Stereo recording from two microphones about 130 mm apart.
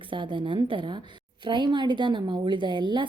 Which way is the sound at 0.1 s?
40° right (ahead or behind).